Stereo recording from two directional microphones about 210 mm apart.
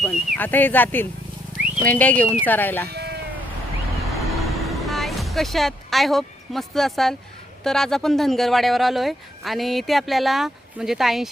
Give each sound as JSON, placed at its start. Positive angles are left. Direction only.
{"t": 0.0, "sound": "speech", "side_deg": 5}
{"t": 2.9, "sound": "sheep", "side_deg": -50}
{"t": 4.1, "sound": "vehicle", "side_deg": 0}
{"t": 7.6, "sound": "speech", "side_deg": 0}